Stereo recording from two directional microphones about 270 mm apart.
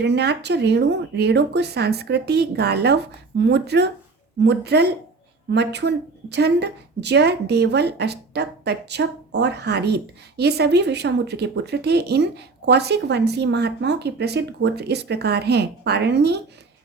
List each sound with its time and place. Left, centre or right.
0.0 s speech: right